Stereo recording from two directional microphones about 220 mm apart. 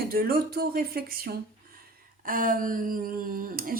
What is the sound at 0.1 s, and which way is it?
Speech, 40° right (ahead or behind).